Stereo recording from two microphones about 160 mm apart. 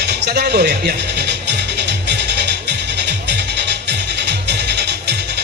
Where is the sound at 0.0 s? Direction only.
90° right.